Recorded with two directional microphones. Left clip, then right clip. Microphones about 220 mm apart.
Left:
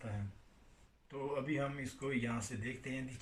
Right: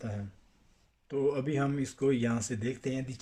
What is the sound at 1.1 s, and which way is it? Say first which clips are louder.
Speech: right 9 dB; 50° right (ahead or behind).